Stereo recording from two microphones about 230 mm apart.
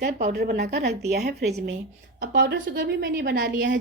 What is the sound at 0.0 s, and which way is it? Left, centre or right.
A woman's voice, right.